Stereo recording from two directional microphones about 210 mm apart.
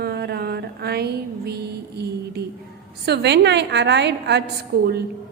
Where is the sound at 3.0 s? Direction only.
50° right (ahead or behind).